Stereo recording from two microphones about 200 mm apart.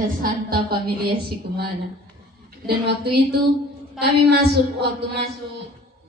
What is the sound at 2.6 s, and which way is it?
A woman's voice, 55° right (ahead or behind).